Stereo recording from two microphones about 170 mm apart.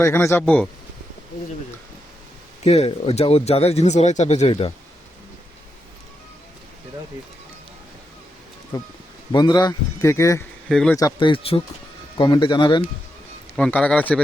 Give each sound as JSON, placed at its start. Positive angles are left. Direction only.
{"t": 0.0, "sound": "speech", "side_deg": 15}
{"t": 2.6, "sound": "speech", "side_deg": 35}
{"t": 9.3, "sound": "speech", "side_deg": 25}
{"t": 10.7, "sound": "speech", "side_deg": 0}
{"t": 10.9, "sound": "speech", "side_deg": 25}
{"t": 13.6, "sound": "speech", "side_deg": 5}